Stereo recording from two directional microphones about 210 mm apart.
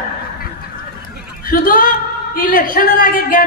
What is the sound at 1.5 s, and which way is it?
A man's voice, 40° left (ahead or behind).